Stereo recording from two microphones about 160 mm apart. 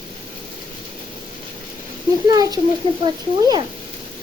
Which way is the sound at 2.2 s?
25° right (ahead or behind).